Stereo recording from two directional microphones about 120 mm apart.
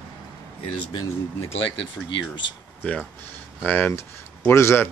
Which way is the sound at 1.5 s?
50° left (ahead or behind).